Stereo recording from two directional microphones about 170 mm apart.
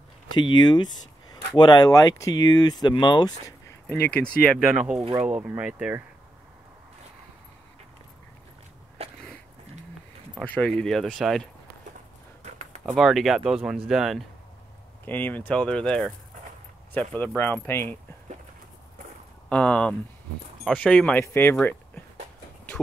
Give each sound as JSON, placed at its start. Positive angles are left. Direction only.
{"t": 0.6, "sound": "speech", "side_deg": 25}
{"t": 3.9, "sound": "speech", "side_deg": 10}
{"t": 9.0, "sound": "a sound", "side_deg": -35}
{"t": 10.4, "sound": "speech", "side_deg": 5}
{"t": 12.8, "sound": "speech", "side_deg": 0}
{"t": 15.0, "sound": "speech", "side_deg": 10}
{"t": 19.5, "sound": "speech", "side_deg": 5}